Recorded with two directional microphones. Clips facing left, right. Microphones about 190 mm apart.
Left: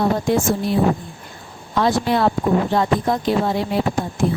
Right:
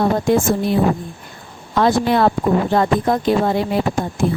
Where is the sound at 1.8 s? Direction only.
55° right (ahead or behind).